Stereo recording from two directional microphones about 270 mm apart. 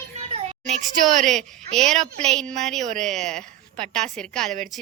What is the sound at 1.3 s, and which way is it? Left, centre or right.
A woman's voice, centre.